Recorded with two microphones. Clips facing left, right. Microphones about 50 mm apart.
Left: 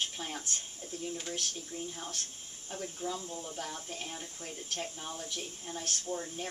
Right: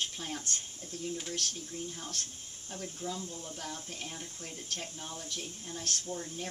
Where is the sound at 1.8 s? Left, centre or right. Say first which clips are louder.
Left 1 dB; left.